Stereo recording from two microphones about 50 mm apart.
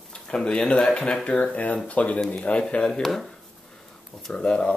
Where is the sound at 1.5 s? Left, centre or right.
Left.